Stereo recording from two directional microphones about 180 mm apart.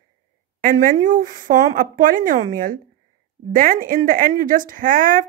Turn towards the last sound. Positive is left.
turn(degrees=-50)  # may be behind; listen again after turning